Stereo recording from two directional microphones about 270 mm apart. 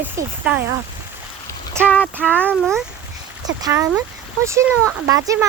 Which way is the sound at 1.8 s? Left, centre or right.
Centre.